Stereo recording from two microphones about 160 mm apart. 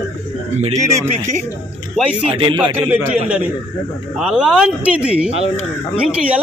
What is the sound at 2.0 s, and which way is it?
Speech, centre (ahead or behind).